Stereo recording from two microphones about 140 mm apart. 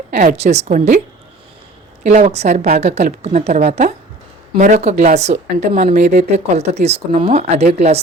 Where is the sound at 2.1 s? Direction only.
55° right (ahead or behind).